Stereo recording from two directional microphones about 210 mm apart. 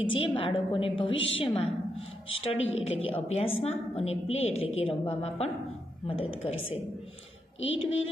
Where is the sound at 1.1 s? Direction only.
65° left (ahead or behind).